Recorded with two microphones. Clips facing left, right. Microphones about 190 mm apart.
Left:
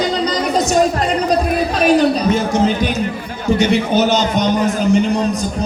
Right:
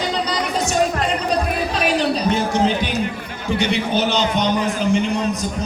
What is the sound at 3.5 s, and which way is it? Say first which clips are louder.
A man's voice: left 5 dB; 45° left (ahead or behind).